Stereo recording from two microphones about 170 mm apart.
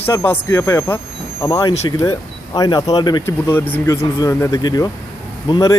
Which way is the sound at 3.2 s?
10° left (ahead or behind).